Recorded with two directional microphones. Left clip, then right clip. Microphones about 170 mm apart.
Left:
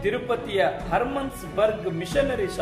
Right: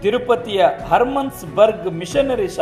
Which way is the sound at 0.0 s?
30° right (ahead or behind).